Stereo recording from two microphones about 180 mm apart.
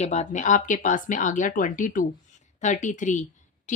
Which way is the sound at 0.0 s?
40° left (ahead or behind).